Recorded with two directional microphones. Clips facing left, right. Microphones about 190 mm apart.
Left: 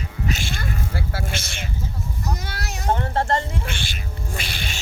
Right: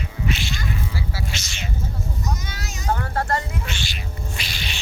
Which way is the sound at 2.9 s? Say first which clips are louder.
Left 2 dB; 25° left (ahead or behind).